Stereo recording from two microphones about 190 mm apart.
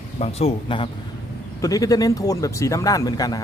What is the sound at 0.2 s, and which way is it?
Speech, 30° left (ahead or behind).